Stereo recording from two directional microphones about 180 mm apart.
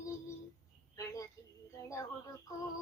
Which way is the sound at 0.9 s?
20° left (ahead or behind).